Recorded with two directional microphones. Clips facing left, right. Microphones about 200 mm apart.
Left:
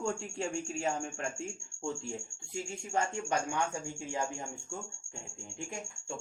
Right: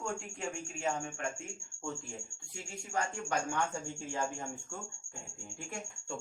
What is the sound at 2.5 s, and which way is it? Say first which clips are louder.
Speech: left 4 dB; 25° left (ahead or behind).